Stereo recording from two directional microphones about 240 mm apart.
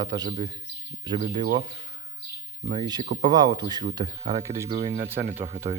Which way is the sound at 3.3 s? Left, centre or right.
Centre.